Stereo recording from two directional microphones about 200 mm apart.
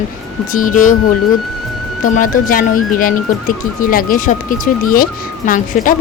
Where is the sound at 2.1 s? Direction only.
45° left (ahead or behind).